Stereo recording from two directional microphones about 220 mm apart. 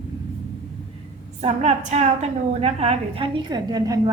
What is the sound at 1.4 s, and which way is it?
A woman's voice, 30° right (ahead or behind).